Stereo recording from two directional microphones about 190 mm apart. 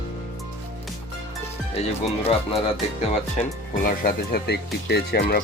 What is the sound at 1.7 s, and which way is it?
Speech, 30° left (ahead or behind).